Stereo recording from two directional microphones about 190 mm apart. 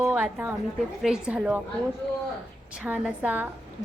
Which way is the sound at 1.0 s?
5° right (ahead or behind).